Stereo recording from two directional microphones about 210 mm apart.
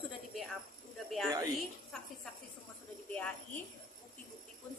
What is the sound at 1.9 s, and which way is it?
Speech, centre (ahead or behind).